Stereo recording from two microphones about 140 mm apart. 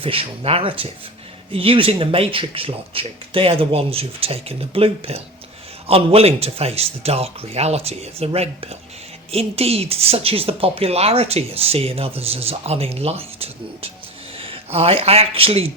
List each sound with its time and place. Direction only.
0.0 s a woman's voice: 40° right (ahead or behind)